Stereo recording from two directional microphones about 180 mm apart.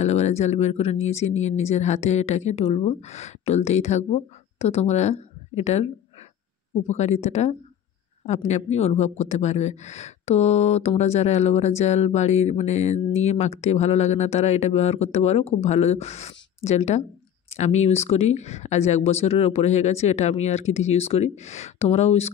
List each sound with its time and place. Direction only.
0.0 s speech: 35° left (ahead or behind)
6.9 s speech: 40° left (ahead or behind)